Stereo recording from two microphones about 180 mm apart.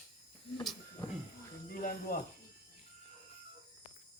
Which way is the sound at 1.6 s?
50° left (ahead or behind).